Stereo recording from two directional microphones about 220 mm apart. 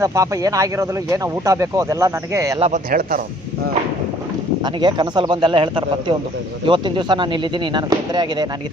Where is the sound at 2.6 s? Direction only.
40° right (ahead or behind).